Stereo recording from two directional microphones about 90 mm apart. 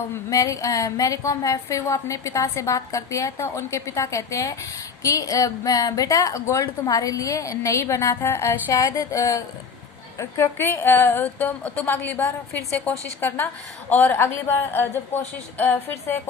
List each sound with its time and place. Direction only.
0.3 s a woman's voice: 40° left (ahead or behind)
8.7 s a woman's voice: 45° left (ahead or behind); by 16.3 s 20° left (ahead or behind)